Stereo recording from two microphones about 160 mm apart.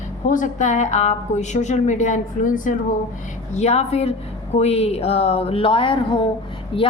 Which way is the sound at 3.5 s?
40° left (ahead or behind).